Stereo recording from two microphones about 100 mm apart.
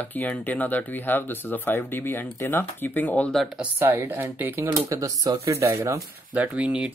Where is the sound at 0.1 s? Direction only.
15° left (ahead or behind).